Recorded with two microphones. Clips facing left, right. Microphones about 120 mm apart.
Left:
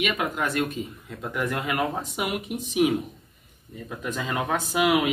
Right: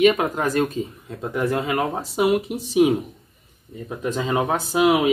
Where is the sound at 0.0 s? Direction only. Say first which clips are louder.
Right 9 dB; 35° right (ahead or behind).